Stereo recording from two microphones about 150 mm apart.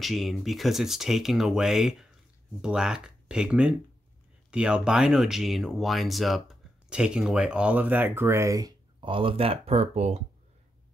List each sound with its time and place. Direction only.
0.0 s speech: centre (ahead or behind); by 8.7 s 20° right (ahead or behind)
9.0 s speech: 35° right (ahead or behind)